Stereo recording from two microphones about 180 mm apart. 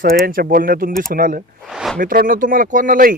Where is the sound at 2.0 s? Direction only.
50° right (ahead or behind).